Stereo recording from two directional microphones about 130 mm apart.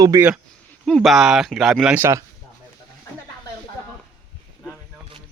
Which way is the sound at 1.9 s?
15° right (ahead or behind).